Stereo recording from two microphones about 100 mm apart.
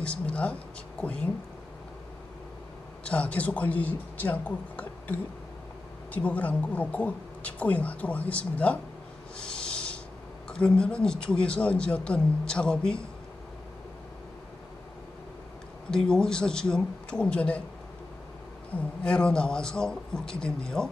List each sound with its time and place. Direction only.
0.0 s a woman's voice: 10° left (ahead or behind)
3.0 s speech: 10° left (ahead or behind)
6.1 s a woman's voice: 15° left (ahead or behind)
9.4 s a sound: 10° left (ahead or behind)
10.5 s a woman's voice: 10° left (ahead or behind)
15.9 s a woman's voice: 5° left (ahead or behind)
18.8 s a woman's voice: 10° left (ahead or behind)